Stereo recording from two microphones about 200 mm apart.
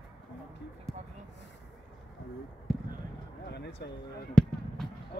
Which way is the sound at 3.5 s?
55° left (ahead or behind).